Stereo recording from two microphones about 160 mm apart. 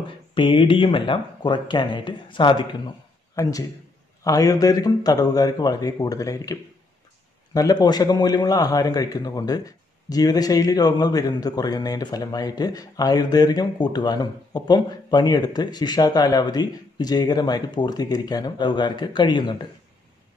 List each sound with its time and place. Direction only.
0.3 s a man's voice: 30° left (ahead or behind)